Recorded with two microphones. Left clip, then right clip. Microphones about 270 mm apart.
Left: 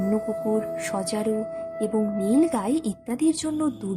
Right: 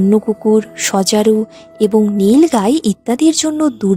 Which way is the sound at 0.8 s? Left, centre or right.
Right.